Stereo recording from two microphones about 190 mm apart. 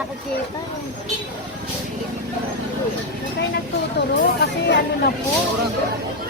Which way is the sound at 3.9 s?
65° left (ahead or behind).